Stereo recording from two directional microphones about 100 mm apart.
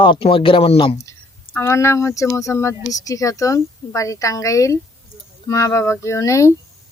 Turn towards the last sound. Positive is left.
turn(degrees=30)  # may be behind; listen again after turning